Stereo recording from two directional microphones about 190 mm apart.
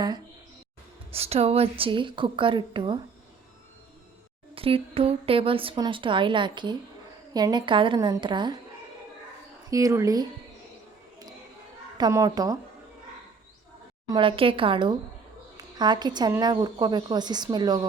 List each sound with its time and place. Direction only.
1.1 s a woman's voice: 30° right (ahead or behind)
4.5 s a woman's voice: 30° right (ahead or behind)
9.6 s speech: 15° right (ahead or behind)
11.9 s a woman's voice: 20° right (ahead or behind)
14.1 s a woman's voice: 25° right (ahead or behind)